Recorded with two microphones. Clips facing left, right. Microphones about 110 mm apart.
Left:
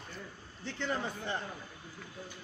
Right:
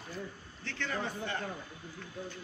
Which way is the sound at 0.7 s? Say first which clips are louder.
Left 1 dB; 15° left (ahead or behind).